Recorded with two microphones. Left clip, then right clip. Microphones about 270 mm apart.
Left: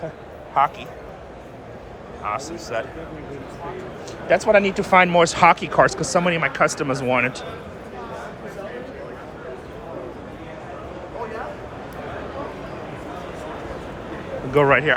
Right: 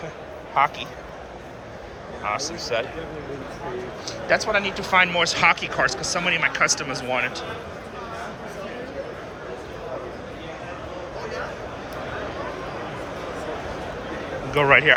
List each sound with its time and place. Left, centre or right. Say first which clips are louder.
0.6 s a man's voice: left 1 dB; centre
2.2 s a man's voice: even; centre
4.3 s speech: left 5 dB; centre
14.5 s a man's voice: even; centre